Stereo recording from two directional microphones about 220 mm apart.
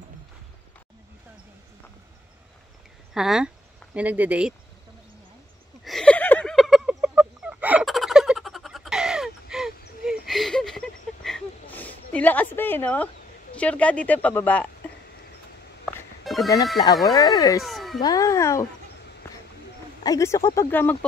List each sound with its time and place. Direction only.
3.2 s speech: 5° right (ahead or behind)
5.9 s chicken: 5° left (ahead or behind)
13.6 s speech: 5° left (ahead or behind)
16.3 s music: centre (ahead or behind)
16.7 s speech: 15° left (ahead or behind)
17.6 s music: centre (ahead or behind)
18.0 s speech: 15° left (ahead or behind)
20.0 s speech: 15° left (ahead or behind)